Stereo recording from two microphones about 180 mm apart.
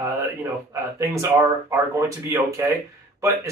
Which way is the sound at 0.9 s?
15° right (ahead or behind).